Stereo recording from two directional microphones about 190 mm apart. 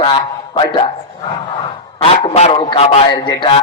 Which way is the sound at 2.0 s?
30° left (ahead or behind).